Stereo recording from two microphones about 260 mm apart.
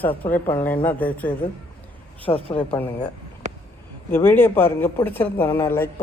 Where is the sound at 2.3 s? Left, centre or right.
Centre.